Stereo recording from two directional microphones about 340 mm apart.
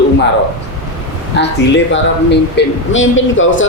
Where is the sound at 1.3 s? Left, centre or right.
Left.